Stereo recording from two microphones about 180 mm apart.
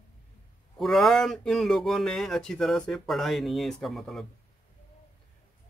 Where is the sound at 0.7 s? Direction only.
Centre (ahead or behind).